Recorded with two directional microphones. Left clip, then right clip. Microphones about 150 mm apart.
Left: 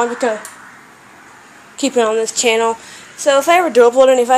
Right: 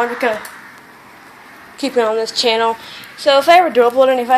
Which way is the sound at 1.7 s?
45° left (ahead or behind).